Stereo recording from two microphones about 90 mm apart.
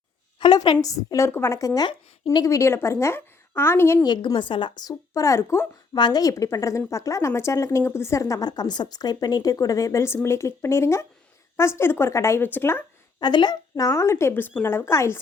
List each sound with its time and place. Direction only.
0.3 s a woman's voice: 55° left (ahead or behind); by 4.0 s 25° left (ahead or behind)
4.0 s a woman's voice: 50° left (ahead or behind); by 5.6 s 30° left (ahead or behind)
5.9 s a woman's voice: 50° left (ahead or behind); by 12.4 s 35° left (ahead or behind)
12.4 s a woman's voice: 20° left (ahead or behind)
13.1 s a woman's voice: 55° left (ahead or behind); by 15.2 s 30° left (ahead or behind)